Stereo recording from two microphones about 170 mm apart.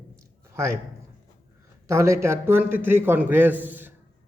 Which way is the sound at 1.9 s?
15° right (ahead or behind).